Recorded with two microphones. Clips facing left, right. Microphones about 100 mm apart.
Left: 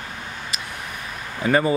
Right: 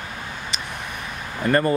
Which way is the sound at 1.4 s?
5° left (ahead or behind).